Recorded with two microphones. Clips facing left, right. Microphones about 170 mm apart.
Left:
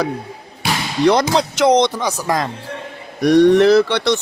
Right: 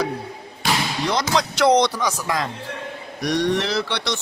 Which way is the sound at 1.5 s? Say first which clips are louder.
Left 2 dB; 20° left (ahead or behind).